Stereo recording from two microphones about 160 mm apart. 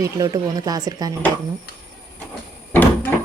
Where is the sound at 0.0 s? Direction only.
20° right (ahead or behind).